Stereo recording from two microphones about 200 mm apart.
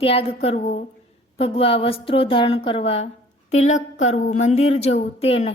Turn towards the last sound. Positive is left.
turn(degrees=30)  # may be behind; listen again after turning